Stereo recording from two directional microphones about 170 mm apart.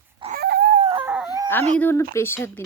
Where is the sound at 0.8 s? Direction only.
35° right (ahead or behind).